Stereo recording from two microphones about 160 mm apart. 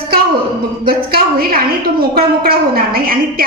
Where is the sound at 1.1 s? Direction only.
70° right (ahead or behind).